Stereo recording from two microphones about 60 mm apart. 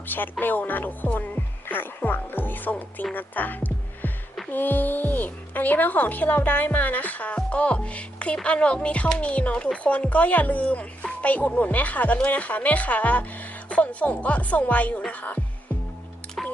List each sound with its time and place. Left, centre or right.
0.1 s music: left
4.5 s speech: left